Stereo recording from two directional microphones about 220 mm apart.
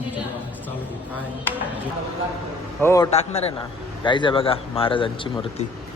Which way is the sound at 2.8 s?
15° left (ahead or behind).